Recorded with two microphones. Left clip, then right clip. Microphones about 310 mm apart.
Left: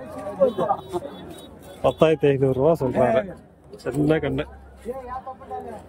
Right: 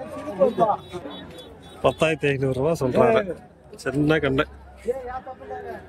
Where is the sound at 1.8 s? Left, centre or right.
Centre.